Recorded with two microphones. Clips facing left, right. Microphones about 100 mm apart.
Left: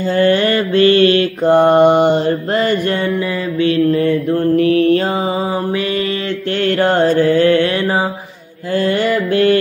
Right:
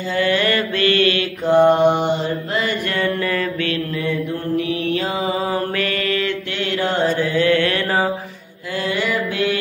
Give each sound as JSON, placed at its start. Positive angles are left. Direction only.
{"t": 0.1, "sound": "mantra", "side_deg": 40}
{"t": 1.4, "sound": "mantra", "side_deg": 50}
{"t": 3.6, "sound": "mantra", "side_deg": 30}
{"t": 4.0, "sound": "mantra", "side_deg": 55}
{"t": 5.5, "sound": "mantra", "side_deg": 25}
{"t": 6.6, "sound": "mantra", "side_deg": 50}
{"t": 7.4, "sound": "mantra", "side_deg": 30}
{"t": 8.7, "sound": "mantra", "side_deg": 50}